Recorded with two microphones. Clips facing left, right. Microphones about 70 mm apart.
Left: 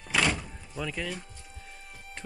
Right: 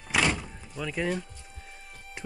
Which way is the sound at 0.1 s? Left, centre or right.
Centre.